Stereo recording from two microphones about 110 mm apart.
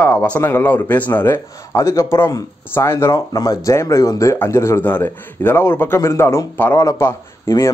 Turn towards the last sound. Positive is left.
turn(degrees=25)  # may be behind; listen again after turning